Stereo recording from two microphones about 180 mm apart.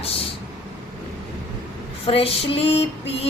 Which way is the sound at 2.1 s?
30° left (ahead or behind).